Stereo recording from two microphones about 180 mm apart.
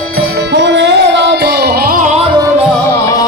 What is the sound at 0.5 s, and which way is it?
Music, 75° right (ahead or behind).